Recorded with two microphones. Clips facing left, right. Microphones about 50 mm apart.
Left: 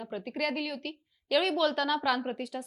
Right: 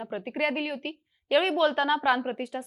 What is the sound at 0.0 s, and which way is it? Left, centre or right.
A woman's voice, right.